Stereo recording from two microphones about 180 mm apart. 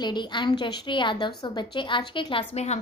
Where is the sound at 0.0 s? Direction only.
25° left (ahead or behind).